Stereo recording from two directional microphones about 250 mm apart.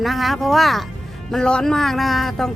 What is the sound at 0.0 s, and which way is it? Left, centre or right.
Speech, centre.